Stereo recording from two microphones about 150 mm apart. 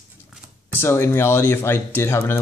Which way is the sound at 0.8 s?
15° left (ahead or behind).